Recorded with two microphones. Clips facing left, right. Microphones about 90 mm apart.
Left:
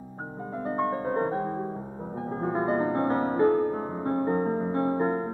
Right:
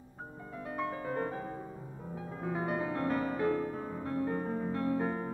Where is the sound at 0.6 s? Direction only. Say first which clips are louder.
Left 9 dB; 35° left (ahead or behind).